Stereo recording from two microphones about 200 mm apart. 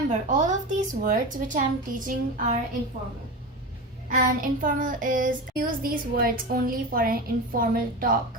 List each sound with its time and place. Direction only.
0.1 s a woman's voice: 40° right (ahead or behind)
4.1 s child singing: 45° right (ahead or behind)